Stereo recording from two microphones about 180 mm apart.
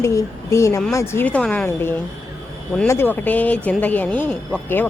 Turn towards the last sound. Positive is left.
turn(degrees=10)  # may be behind; listen again after turning